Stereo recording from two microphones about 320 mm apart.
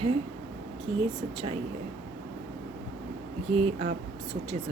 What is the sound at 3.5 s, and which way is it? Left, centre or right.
Speech, centre.